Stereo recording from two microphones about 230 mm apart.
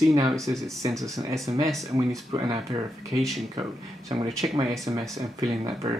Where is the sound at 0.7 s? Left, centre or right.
Centre.